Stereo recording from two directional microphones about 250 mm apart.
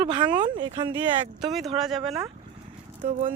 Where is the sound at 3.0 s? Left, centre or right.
Right.